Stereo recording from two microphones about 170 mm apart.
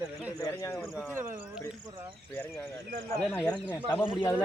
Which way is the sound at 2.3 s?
10° left (ahead or behind).